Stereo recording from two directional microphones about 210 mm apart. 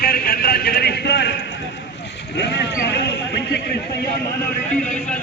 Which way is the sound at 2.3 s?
55° left (ahead or behind).